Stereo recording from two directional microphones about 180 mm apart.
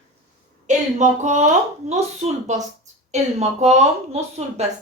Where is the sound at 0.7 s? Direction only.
40° right (ahead or behind).